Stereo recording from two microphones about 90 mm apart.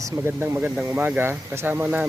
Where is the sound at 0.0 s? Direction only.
25° right (ahead or behind).